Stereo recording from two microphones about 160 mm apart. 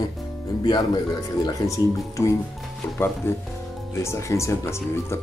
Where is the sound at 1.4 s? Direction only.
20° left (ahead or behind).